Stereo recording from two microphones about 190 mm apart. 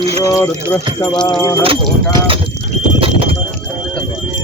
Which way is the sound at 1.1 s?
5° left (ahead or behind).